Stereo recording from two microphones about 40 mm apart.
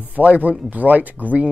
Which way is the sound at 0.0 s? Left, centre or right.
Right.